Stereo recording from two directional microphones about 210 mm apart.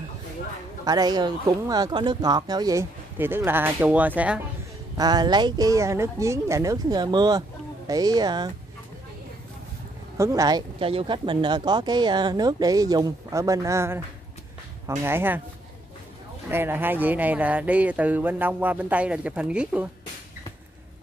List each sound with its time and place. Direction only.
0.8 s speech: 20° right (ahead or behind)
4.9 s speech: 20° right (ahead or behind)
10.1 s speech: 15° right (ahead or behind)
16.4 s speech: 10° right (ahead or behind)